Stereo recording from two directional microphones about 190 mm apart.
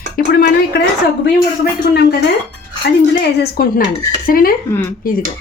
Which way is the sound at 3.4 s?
50° left (ahead or behind).